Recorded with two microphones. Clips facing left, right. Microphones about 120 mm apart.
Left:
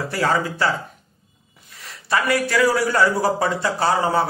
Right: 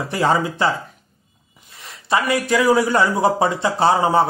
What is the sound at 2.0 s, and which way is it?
A man's voice, 20° right (ahead or behind).